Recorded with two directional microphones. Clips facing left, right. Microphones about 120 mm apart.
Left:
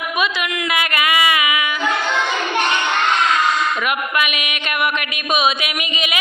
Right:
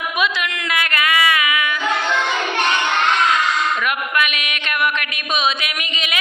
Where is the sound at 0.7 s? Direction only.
10° left (ahead or behind).